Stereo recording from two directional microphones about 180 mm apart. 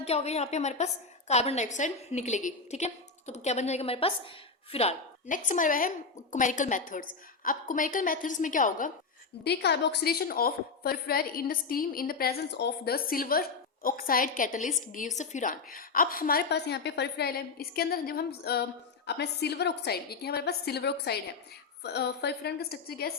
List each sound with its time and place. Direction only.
0.0 s a woman's voice: 35° left (ahead or behind)
5.3 s a woman's voice: 45° left (ahead or behind)
9.4 s a woman's voice: 65° left (ahead or behind)